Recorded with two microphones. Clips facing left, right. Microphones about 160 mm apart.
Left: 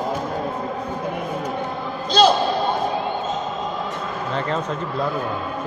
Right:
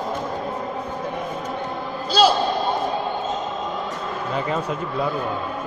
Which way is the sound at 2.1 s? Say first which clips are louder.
Left 1 dB; 10° right (ahead or behind).